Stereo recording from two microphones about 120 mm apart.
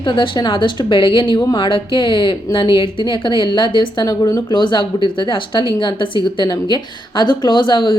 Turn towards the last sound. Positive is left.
turn(degrees=40)  # may be behind; listen again after turning